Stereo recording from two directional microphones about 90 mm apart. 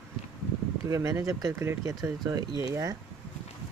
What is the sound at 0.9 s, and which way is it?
Speech, 35° right (ahead or behind).